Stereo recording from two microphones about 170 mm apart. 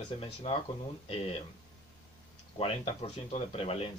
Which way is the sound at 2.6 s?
35° left (ahead or behind).